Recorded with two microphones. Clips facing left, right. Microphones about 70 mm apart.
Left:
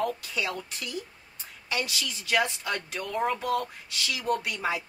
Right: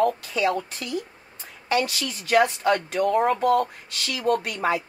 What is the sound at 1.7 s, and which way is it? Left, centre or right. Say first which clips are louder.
Speech: right 7 dB; right.